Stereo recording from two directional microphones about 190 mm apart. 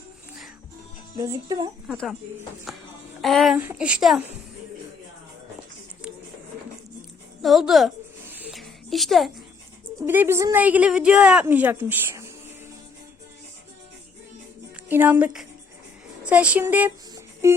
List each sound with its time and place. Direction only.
1.1 s a woman's voice: 15° right (ahead or behind)
1.9 s speech: centre (ahead or behind)
7.4 s a sound: centre (ahead or behind)
10.1 s a woman's voice: 10° right (ahead or behind)
14.8 s a woman's voice: 10° right (ahead or behind)
17.4 s a sound: 15° right (ahead or behind)